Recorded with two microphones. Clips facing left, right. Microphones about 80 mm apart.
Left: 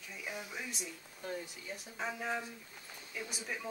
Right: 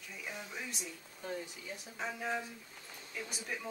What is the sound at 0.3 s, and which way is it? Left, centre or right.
Speech, centre.